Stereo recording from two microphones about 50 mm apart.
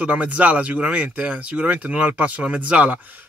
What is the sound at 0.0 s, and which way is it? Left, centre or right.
Speech, right.